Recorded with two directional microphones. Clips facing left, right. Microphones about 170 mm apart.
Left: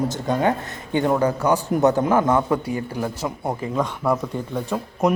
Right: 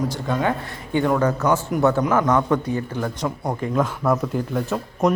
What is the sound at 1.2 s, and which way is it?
Speech, 10° left (ahead or behind).